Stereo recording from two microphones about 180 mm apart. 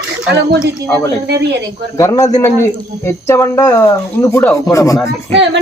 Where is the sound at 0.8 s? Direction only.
10° left (ahead or behind).